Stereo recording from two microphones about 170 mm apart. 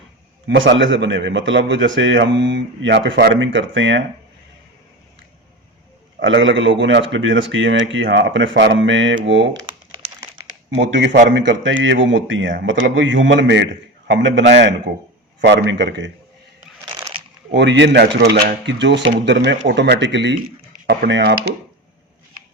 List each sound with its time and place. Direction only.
0.4 s a man's voice: 90° right
6.1 s a man's voice: 90° right
10.8 s a man's voice: 90° right
17.5 s a man's voice: 90° right
20.8 s speech: 75° right (ahead or behind)